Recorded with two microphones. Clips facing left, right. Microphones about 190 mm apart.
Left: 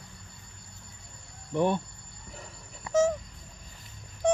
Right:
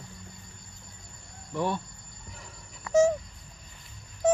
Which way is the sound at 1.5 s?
20° left (ahead or behind).